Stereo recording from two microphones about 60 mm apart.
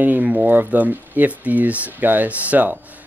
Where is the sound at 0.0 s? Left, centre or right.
Right.